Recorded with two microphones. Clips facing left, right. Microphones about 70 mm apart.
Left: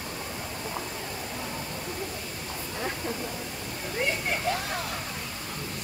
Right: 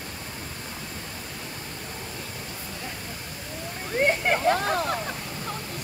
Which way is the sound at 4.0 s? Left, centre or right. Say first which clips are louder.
Right 7 dB; right.